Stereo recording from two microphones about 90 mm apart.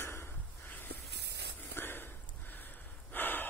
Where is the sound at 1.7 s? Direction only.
25° left (ahead or behind).